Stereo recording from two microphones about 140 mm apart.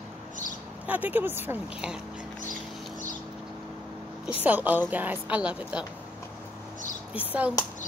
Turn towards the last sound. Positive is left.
turn(degrees=-10)  # may be behind; listen again after turning